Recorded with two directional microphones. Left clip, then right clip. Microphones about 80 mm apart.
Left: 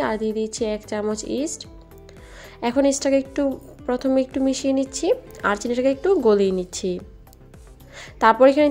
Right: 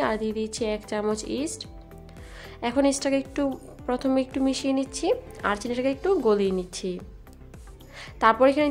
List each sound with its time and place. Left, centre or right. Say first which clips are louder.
0.0 s a woman's voice: left 3 dB; left
2.7 s a woman's voice: left 5 dB; left